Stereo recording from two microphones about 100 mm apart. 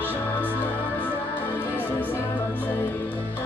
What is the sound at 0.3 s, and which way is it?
Music, 15° left (ahead or behind).